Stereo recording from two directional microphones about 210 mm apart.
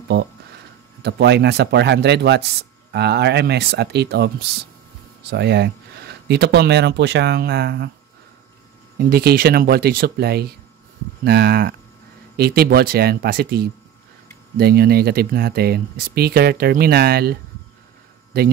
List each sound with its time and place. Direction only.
1.0 s speech: 50° right (ahead or behind)
8.9 s speech: 45° right (ahead or behind)